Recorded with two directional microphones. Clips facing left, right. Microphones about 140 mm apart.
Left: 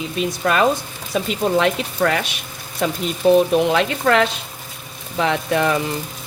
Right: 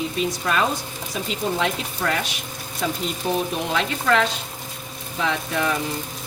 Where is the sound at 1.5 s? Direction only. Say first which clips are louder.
Left 7 dB; 85° left.